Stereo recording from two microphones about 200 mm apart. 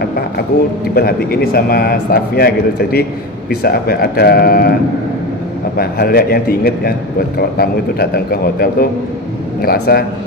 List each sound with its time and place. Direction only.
0.9 s a man's voice: 50° left (ahead or behind)
5.8 s a man's voice: 50° left (ahead or behind)